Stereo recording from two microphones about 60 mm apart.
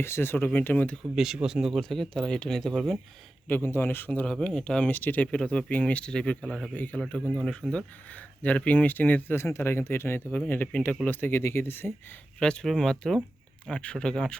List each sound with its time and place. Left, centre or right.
0.0 s speech: left
1.1 s speech: centre
1.8 s speech: centre
3.5 s speech: left
4.3 s speech: centre
5.3 s speech: centre
6.7 s speech: left
7.3 s speech: centre; by 10.2 s left
10.3 s speech: left
12.4 s speech: centre